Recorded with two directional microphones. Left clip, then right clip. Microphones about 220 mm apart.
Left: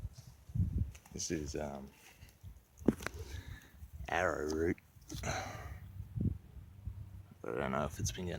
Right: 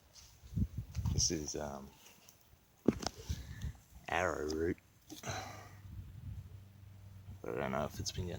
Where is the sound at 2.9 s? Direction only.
5° left (ahead or behind).